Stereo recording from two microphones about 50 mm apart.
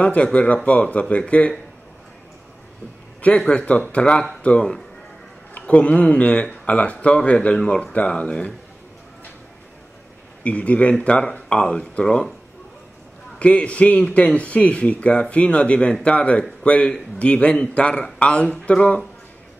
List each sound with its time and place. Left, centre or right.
0.0 s a man's voice: left
3.3 s a man's voice: left
5.7 s a man's voice: left
10.4 s a man's voice: left
13.4 s a man's voice: left